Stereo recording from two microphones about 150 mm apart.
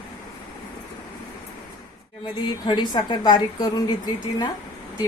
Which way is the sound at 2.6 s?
30° left (ahead or behind).